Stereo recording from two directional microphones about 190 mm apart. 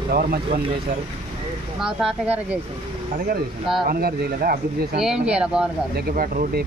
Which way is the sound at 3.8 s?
50° right (ahead or behind).